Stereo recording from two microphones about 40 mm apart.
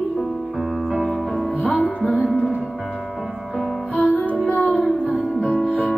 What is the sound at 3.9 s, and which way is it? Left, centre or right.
Music, left.